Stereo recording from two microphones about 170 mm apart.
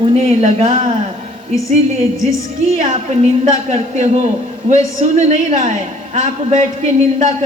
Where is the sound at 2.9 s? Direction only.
40° right (ahead or behind).